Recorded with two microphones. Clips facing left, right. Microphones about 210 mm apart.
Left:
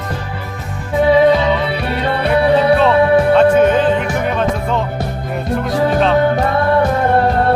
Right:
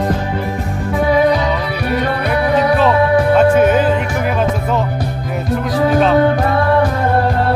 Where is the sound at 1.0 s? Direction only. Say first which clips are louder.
Left 3 dB; 25° left (ahead or behind).